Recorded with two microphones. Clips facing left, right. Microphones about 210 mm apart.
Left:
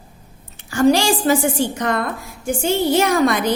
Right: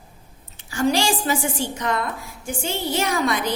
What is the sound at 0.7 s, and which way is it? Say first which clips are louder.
A woman's voice: left 6 dB; 45° left (ahead or behind).